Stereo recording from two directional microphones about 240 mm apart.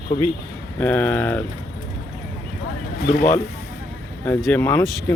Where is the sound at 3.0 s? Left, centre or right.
Left.